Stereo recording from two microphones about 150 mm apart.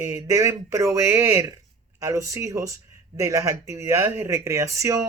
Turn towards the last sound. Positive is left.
turn(degrees=-20)  # may be behind; listen again after turning